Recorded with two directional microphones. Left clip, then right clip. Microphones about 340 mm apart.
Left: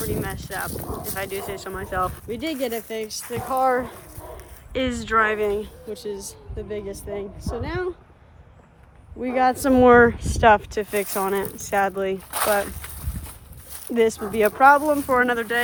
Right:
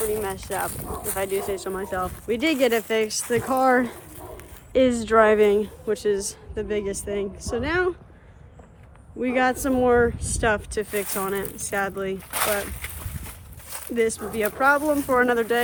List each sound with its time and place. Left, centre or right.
0.2 s speech: centre
3.5 s speech: right
4.7 s speech: centre
5.4 s speech: right
5.9 s speech: centre
9.2 s speech: centre